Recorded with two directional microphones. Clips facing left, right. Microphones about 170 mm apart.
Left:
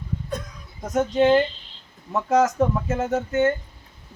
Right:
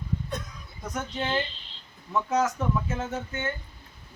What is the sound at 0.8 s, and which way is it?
Speech, 45° left (ahead or behind).